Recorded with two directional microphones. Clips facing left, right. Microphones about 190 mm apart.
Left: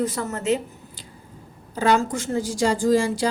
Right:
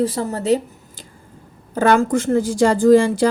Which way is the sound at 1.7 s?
55° right (ahead or behind).